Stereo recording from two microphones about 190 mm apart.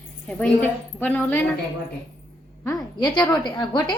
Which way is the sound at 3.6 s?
20° left (ahead or behind).